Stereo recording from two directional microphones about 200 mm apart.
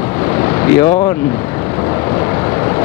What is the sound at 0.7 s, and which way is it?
Speech, 20° left (ahead or behind).